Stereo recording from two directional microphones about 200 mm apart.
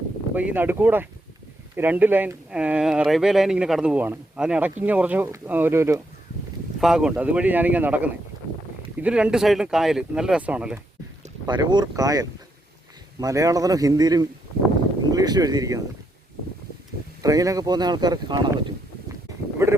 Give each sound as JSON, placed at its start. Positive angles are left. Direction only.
{"t": 0.3, "sound": "speech", "side_deg": -10}
{"t": 6.7, "sound": "speech", "side_deg": 0}
{"t": 11.4, "sound": "speech", "side_deg": -20}
{"t": 17.2, "sound": "speech", "side_deg": -15}
{"t": 19.6, "sound": "a sound", "side_deg": -10}